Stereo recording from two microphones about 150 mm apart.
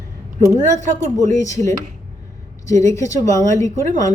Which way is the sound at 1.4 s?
20° left (ahead or behind).